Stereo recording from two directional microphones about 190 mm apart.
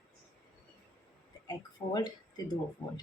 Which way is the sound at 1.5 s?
20° left (ahead or behind).